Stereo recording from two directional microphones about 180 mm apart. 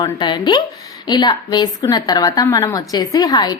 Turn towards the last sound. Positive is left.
turn(degrees=20)  # may be behind; listen again after turning